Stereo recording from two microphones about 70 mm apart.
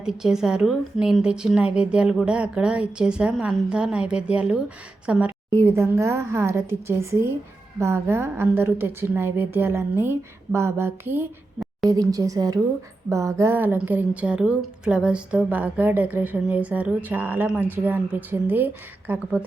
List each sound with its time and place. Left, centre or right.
0.0 s a woman's voice: centre
5.5 s a woman's voice: right
11.9 s speech: right
13.1 s a woman's voice: right
13.5 s a woman's voice: right